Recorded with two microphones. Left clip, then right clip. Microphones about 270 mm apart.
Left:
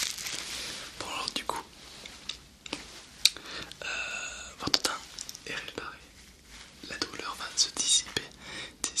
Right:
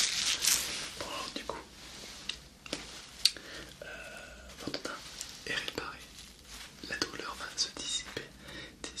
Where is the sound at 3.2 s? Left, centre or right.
Centre.